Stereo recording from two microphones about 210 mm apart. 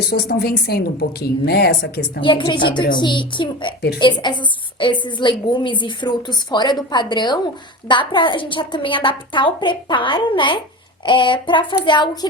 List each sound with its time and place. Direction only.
0.1 s a woman's voice: 50° left (ahead or behind)
2.2 s a woman's voice: 25° left (ahead or behind)